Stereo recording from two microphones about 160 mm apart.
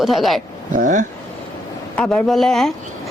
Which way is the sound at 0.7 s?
50° right (ahead or behind).